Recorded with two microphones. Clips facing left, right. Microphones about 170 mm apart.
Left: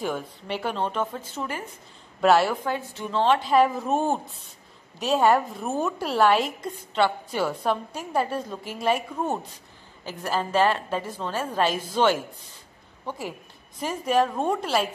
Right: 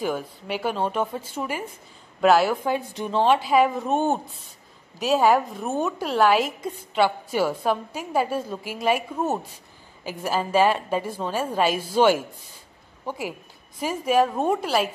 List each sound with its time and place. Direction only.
0.0 s a woman's voice: 5° right (ahead or behind)
13.7 s a woman's voice: 5° right (ahead or behind)